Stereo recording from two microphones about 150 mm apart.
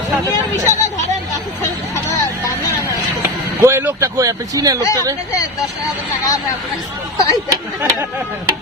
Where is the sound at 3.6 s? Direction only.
15° right (ahead or behind).